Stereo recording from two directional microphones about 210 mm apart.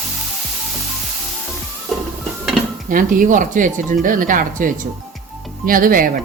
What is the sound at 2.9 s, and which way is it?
Speech, 40° right (ahead or behind).